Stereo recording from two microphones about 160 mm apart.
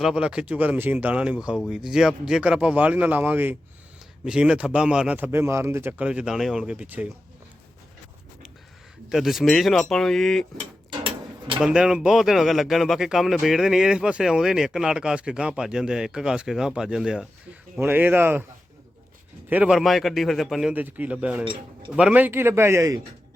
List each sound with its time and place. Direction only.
0.0 s speech: 5° right (ahead or behind)
9.0 s speech: centre (ahead or behind)
10.6 s a sound: 35° right (ahead or behind)
11.6 s speech: 5° right (ahead or behind)
19.5 s speech: 10° right (ahead or behind)